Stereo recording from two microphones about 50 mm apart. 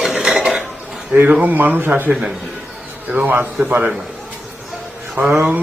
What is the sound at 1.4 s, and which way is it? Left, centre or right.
Speech, right.